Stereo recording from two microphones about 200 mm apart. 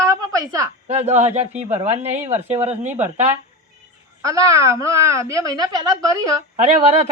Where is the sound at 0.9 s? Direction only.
35° right (ahead or behind).